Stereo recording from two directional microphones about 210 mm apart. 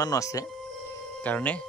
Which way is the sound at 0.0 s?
15° left (ahead or behind).